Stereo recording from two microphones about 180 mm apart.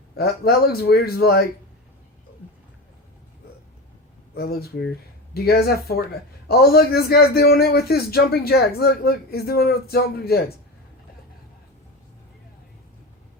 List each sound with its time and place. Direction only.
0.2 s a man's voice: 60° left (ahead or behind)
4.4 s a man's voice: 60° left (ahead or behind)